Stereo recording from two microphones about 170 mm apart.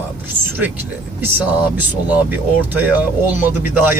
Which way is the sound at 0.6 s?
10° right (ahead or behind).